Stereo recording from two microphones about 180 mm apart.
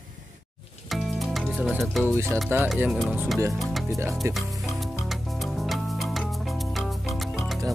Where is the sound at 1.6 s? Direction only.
Centre (ahead or behind).